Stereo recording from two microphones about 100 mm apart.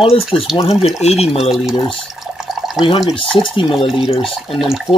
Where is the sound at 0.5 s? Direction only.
90° left.